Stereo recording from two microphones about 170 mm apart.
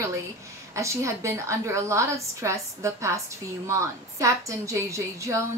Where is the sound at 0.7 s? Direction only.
15° right (ahead or behind).